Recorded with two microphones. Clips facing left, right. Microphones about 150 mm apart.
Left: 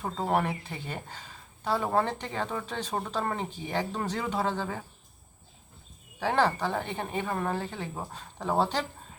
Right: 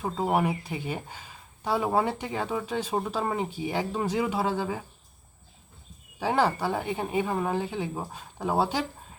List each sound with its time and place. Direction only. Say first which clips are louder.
0.0 s speech: right 2 dB; 10° right (ahead or behind)
6.1 s speech: right 1 dB; 10° right (ahead or behind)